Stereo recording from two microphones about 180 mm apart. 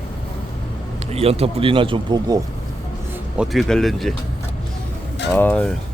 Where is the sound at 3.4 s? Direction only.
Centre (ahead or behind).